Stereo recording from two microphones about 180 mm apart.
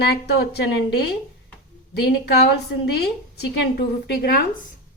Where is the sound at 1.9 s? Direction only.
65° left (ahead or behind).